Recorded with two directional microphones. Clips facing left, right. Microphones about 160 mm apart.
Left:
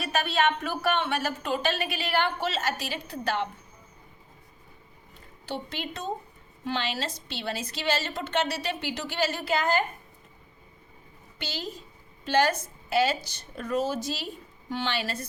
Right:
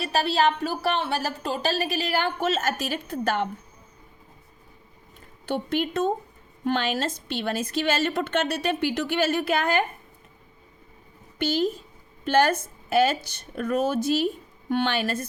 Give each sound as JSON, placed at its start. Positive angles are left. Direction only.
{"t": 0.0, "sound": "a woman's voice", "side_deg": -35}
{"t": 5.5, "sound": "a woman's voice", "side_deg": -50}
{"t": 11.3, "sound": "a woman's voice", "side_deg": -50}